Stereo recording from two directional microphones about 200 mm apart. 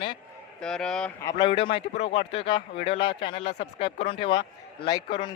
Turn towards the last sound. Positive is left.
turn(degrees=20)  # may be behind; listen again after turning